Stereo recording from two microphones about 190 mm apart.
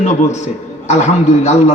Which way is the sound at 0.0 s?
40° left (ahead or behind).